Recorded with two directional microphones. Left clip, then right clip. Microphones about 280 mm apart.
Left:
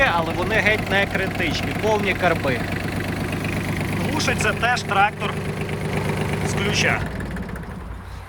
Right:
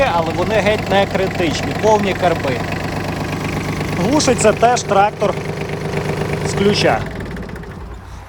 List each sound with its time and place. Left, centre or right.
0.0 s speech: centre
4.2 s speech: centre
6.5 s speech: centre